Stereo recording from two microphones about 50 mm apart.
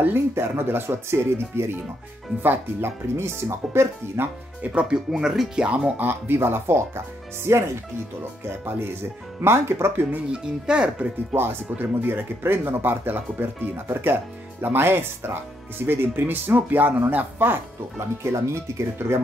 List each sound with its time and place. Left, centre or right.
0.3 s speech: right
2.4 s speech: right
3.2 s speech: right
4.2 s speech: right
4.6 s speech: centre
5.9 s speech: right
7.4 s speech: right
8.5 s speech: right
10.3 s speech: centre
11.8 s speech: right
18.3 s speech: right